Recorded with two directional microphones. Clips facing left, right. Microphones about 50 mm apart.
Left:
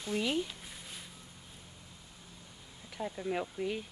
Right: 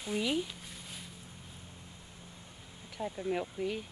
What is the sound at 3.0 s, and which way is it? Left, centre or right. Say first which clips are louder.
Speech: right 1 dB; centre.